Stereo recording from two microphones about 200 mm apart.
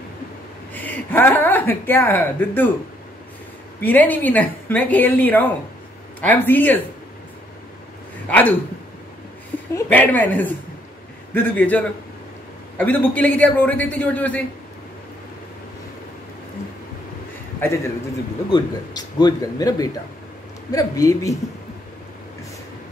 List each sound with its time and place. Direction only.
0.7 s speech: 10° left (ahead or behind)
3.8 s a woman's voice: 10° left (ahead or behind)
8.3 s a woman's voice: 10° left (ahead or behind)
9.8 s a woman's voice: 10° left (ahead or behind)
17.6 s a man's voice: 15° left (ahead or behind)